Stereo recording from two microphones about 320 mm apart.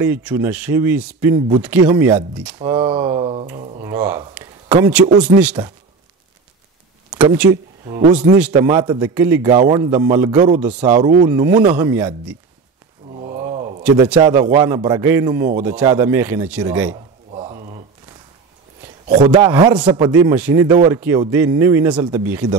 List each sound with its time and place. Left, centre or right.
0.0 s speech: centre
7.1 s a man's voice: centre
8.4 s speech: centre
13.1 s a sound: centre
13.8 s speech: centre
16.9 s a sound: centre
19.0 s a man's voice: right
19.4 s speech: centre